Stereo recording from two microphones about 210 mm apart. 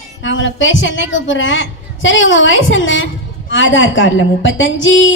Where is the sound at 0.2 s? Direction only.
65° left (ahead or behind).